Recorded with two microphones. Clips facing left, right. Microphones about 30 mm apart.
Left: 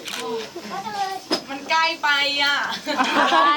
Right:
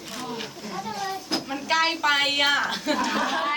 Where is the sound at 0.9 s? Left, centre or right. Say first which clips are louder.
Left 6 dB; left.